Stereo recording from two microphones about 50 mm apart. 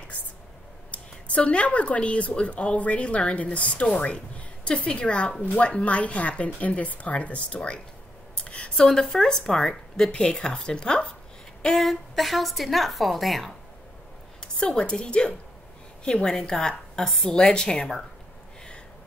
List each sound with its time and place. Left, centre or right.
0.9 s speech: left
8.5 s a sound: left
8.8 s speech: centre
11.6 s a woman's voice: centre
14.6 s a woman's voice: centre